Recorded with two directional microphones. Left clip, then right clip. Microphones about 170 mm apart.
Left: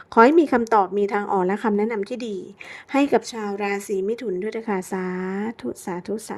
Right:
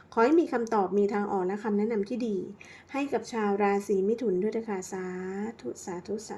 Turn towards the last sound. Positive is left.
turn(degrees=40)  # may be behind; listen again after turning